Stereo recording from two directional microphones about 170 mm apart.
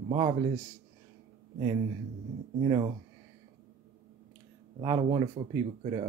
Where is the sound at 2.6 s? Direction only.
30° right (ahead or behind).